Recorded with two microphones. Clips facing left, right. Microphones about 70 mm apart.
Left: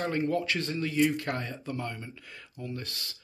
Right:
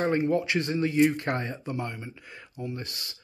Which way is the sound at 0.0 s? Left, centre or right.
Right.